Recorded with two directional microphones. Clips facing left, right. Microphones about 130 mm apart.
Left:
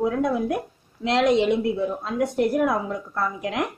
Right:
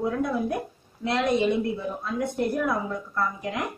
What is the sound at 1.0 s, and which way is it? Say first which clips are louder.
A woman's voice: left 4 dB; 90° left.